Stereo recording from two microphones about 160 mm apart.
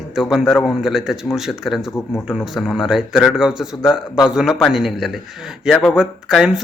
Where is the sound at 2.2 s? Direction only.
5° right (ahead or behind).